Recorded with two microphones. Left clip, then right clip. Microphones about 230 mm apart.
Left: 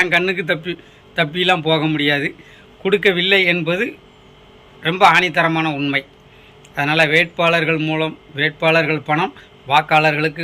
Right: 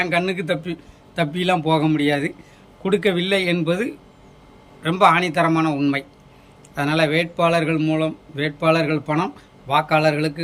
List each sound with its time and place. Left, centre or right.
0.0 s speech: centre